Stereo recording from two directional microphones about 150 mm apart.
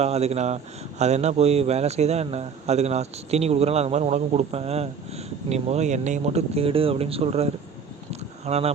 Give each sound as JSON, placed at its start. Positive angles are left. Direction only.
{"t": 0.0, "sound": "speech", "side_deg": -45}